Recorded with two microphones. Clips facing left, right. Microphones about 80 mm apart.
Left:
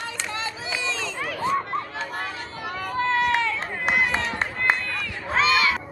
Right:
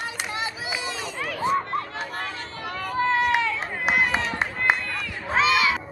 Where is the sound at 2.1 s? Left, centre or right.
Centre.